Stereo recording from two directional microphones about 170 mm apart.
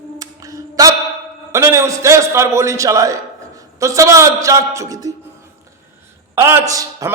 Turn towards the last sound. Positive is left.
turn(degrees=-20)  # may be behind; listen again after turning